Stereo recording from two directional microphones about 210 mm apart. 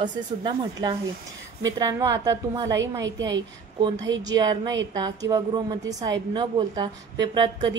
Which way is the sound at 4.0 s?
60° right (ahead or behind).